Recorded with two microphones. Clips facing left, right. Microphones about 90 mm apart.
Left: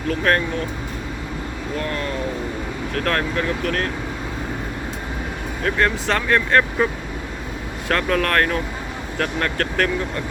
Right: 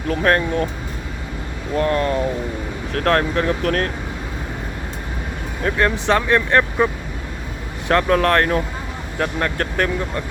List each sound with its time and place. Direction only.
0.1 s speech: 30° right (ahead or behind)
1.7 s speech: 35° right (ahead or behind)
5.6 s speech: 20° right (ahead or behind)
7.9 s speech: 25° right (ahead or behind)